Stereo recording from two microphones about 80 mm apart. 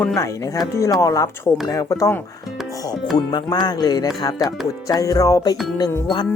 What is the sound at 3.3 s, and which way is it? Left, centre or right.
Speech, left.